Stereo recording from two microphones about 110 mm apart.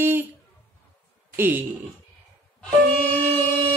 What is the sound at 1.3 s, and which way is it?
Speech, 20° right (ahead or behind).